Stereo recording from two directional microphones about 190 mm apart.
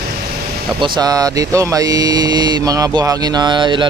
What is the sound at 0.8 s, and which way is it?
Speech, 20° right (ahead or behind).